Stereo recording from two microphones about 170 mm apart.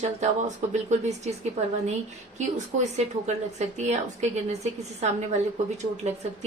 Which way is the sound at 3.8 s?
40° right (ahead or behind).